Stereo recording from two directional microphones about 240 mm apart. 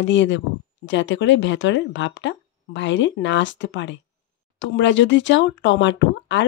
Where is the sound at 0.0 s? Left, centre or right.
Left.